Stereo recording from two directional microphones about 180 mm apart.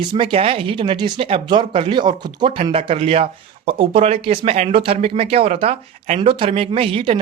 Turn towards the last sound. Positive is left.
turn(degrees=-30)  # may be behind; listen again after turning